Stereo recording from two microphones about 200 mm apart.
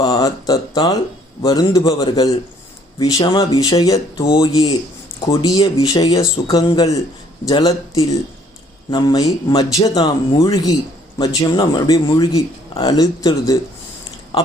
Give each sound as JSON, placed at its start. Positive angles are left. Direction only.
{"t": 0.0, "sound": "speech", "side_deg": 15}